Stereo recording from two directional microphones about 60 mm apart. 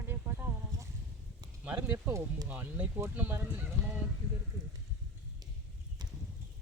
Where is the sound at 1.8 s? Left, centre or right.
Right.